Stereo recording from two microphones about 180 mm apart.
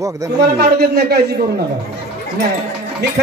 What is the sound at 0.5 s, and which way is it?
Music, 60° right (ahead or behind).